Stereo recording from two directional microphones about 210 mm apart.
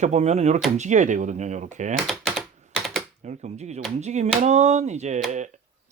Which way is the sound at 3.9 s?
30° right (ahead or behind).